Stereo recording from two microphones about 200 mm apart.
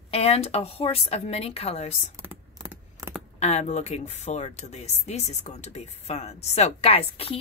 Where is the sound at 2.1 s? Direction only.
10° right (ahead or behind).